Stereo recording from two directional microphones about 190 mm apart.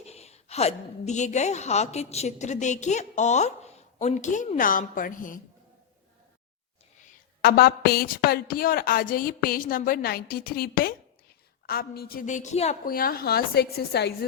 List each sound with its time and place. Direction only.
0.0 s a woman's voice: 35° left (ahead or behind)
7.4 s a woman's voice: 55° left (ahead or behind); by 12.7 s 35° left (ahead or behind)
12.8 s a woman's voice: 50° left (ahead or behind)